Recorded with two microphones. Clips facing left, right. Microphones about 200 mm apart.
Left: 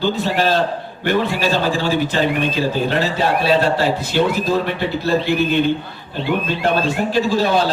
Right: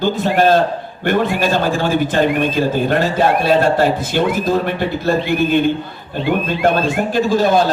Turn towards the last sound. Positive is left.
turn(degrees=-45)  # may be behind; listen again after turning